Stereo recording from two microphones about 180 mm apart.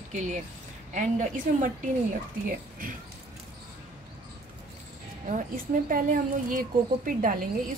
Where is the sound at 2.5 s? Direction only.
50° right (ahead or behind).